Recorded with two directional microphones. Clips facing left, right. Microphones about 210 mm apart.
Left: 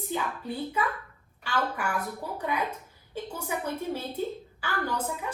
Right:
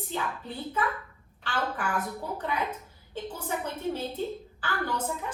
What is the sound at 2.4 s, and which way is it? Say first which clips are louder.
A woman's voice: left 3 dB; 10° left (ahead or behind).